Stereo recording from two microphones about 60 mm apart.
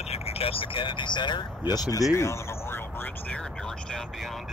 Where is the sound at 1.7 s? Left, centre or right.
Left.